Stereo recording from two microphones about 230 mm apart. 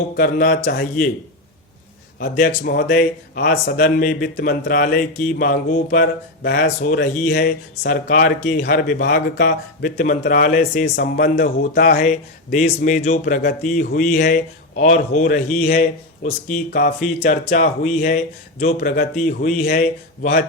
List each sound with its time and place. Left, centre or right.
0.2 s speech: left
2.1 s speech: left